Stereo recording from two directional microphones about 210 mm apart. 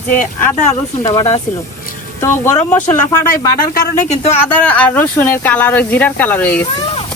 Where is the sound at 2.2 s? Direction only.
10° left (ahead or behind).